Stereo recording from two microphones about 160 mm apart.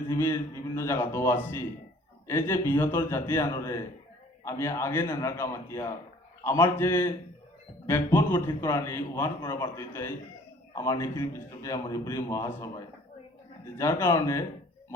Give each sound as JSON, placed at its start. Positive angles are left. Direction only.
{"t": 0.1, "sound": "a man's voice", "side_deg": 15}
{"t": 13.7, "sound": "a man's voice", "side_deg": 15}